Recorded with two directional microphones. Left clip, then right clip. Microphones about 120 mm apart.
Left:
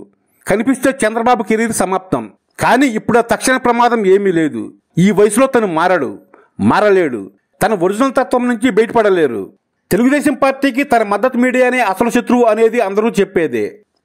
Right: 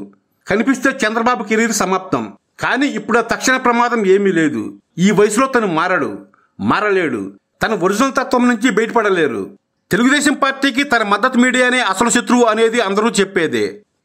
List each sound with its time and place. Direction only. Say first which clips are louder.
0.5 s a man's voice: left 1 dB; 50° left (ahead or behind); by 13.7 s 30° left (ahead or behind)